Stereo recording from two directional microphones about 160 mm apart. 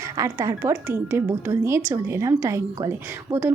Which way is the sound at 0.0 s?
20° right (ahead or behind).